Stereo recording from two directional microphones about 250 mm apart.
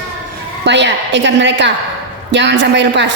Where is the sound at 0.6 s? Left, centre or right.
Right.